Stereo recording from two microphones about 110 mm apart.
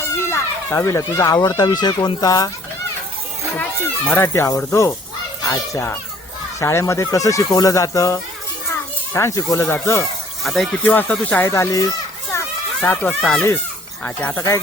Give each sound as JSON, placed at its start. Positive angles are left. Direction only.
{"t": 0.2, "sound": "speech", "side_deg": 25}
{"t": 4.1, "sound": "a child's voice", "side_deg": 25}
{"t": 10.4, "sound": "speech", "side_deg": 0}
{"t": 10.8, "sound": "speech", "side_deg": 15}
{"t": 11.4, "sound": "children playing", "side_deg": 25}
{"t": 12.8, "sound": "speech", "side_deg": 15}
{"t": 13.1, "sound": "speech", "side_deg": 5}
{"t": 14.0, "sound": "speech", "side_deg": 15}
{"t": 14.3, "sound": "speech", "side_deg": 25}